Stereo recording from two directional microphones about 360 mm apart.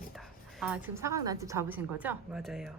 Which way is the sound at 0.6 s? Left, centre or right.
Centre.